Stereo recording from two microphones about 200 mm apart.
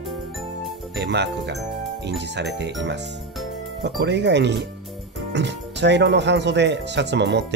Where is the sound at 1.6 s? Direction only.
Centre (ahead or behind).